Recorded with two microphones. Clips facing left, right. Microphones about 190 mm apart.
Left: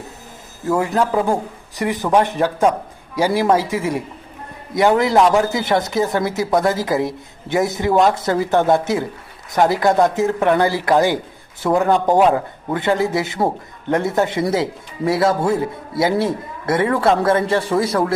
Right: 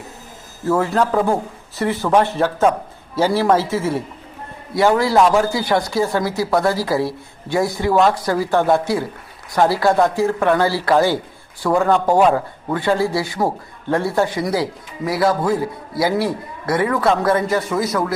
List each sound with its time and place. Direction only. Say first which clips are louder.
0.7 s a man's voice: even; 15° left (ahead or behind); by 18.1 s 30° left (ahead or behind)